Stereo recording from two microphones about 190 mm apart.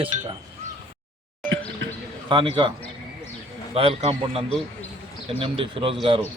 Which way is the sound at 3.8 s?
30° right (ahead or behind).